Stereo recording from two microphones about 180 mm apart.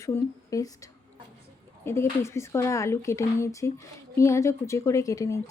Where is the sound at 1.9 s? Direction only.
15° left (ahead or behind).